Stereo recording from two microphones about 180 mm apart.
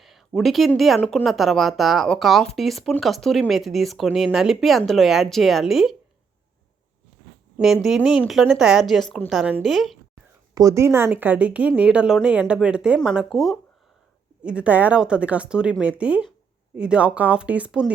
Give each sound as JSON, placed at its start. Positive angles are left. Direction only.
{"t": 0.0, "sound": "speech", "side_deg": 0}
{"t": 7.6, "sound": "speech", "side_deg": 0}
{"t": 10.5, "sound": "a woman's voice", "side_deg": -20}